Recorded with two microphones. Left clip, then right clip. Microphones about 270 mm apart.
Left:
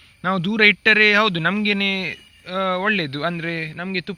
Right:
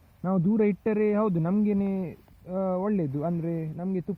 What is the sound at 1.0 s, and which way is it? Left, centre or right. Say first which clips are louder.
Speech: left 10 dB; left.